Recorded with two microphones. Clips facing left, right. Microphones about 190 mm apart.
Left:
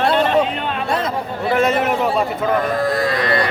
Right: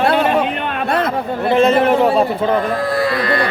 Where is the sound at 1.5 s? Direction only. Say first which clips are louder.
Right 4 dB; 25° right (ahead or behind).